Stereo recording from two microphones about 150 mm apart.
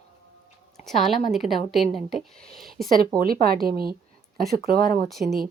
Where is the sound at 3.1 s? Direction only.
80° right.